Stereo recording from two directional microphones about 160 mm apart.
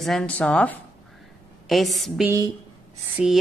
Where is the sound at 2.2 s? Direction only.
20° right (ahead or behind).